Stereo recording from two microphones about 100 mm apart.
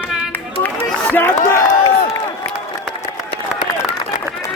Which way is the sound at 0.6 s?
20° left (ahead or behind).